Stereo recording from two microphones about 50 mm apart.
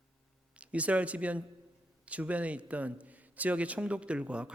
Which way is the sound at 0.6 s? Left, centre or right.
Right.